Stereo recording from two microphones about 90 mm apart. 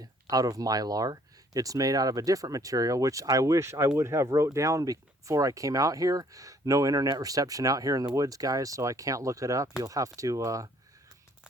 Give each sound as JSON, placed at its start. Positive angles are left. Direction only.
{"t": 0.0, "sound": "speech", "side_deg": -45}